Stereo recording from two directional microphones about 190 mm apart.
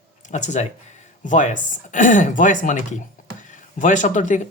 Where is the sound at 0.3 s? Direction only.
40° left (ahead or behind).